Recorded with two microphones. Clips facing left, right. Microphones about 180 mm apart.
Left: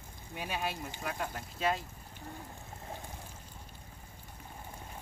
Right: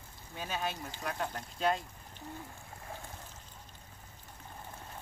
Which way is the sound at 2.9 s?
15° left (ahead or behind).